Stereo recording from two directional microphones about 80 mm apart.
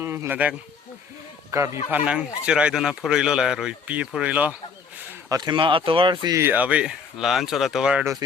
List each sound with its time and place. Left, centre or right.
0.0 s sheep: right
1.5 s speech: right
1.9 s speech: centre
5.4 s speech: right
6.5 s speech: centre